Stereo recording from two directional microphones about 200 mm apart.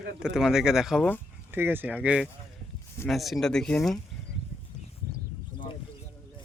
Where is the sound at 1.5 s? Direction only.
10° right (ahead or behind).